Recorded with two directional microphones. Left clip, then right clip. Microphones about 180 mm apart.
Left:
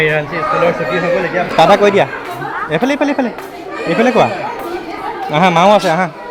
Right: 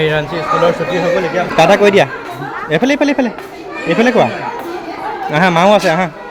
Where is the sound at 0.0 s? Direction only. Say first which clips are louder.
Left 1 dB; 25° right (ahead or behind).